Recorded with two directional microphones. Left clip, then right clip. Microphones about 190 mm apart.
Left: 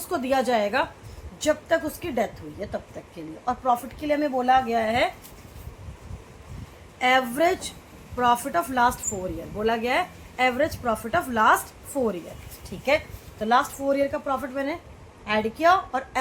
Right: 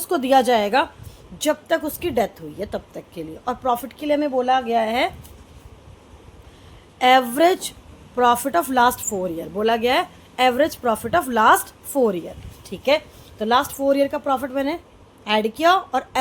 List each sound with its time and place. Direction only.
0.1 s a woman's voice: 50° right (ahead or behind)
7.0 s a woman's voice: 55° right (ahead or behind)